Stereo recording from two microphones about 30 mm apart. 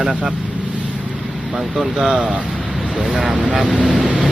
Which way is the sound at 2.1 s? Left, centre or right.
Right.